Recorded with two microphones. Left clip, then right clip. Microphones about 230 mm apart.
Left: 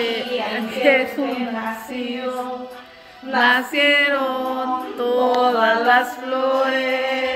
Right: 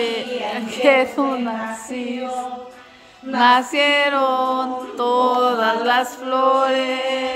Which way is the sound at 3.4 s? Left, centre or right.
Centre.